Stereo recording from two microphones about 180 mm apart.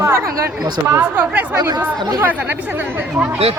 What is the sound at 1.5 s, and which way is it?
Speech, 20° right (ahead or behind).